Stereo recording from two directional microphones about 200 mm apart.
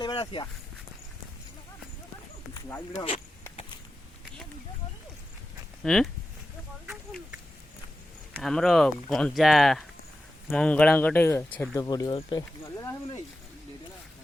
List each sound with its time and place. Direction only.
0.0 s speech: 25° left (ahead or behind)
2.6 s speech: 10° left (ahead or behind)
2.9 s speech: 30° left (ahead or behind)
5.8 s speech: centre (ahead or behind)
8.4 s speech: centre (ahead or behind)